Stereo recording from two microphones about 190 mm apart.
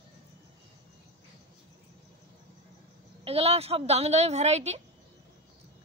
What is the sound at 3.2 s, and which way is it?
A woman's voice, 30° right (ahead or behind).